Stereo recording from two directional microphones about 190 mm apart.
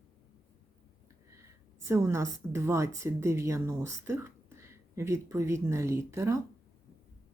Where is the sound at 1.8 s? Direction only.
15° right (ahead or behind).